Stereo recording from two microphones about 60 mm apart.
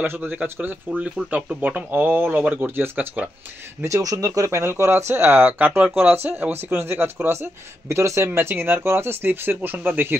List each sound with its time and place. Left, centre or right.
0.0 s speech: right
0.8 s speech: centre; by 3.1 s right
3.8 s speech: right
4.6 s speech: right
7.9 s speech: right
8.4 s speech: right